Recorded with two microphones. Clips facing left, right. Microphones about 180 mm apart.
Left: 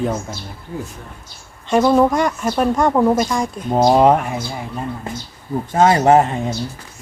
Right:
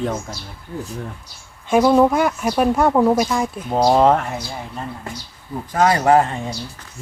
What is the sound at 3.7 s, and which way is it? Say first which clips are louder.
Speech: left 2 dB; 20° left (ahead or behind).